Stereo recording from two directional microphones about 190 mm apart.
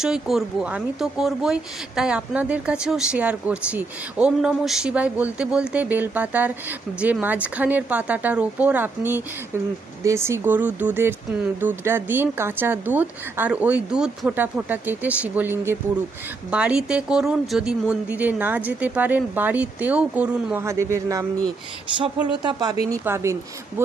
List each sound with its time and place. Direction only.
0.0 s speech: centre (ahead or behind); by 22.7 s 25° right (ahead or behind)
22.9 s speech: 15° right (ahead or behind)